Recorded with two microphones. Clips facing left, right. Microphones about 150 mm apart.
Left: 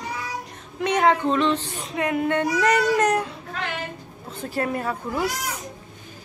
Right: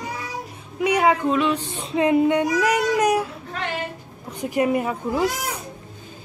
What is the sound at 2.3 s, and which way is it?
Speech, 10° right (ahead or behind).